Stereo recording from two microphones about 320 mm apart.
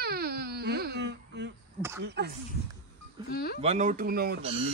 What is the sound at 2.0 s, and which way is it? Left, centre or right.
Speech, right.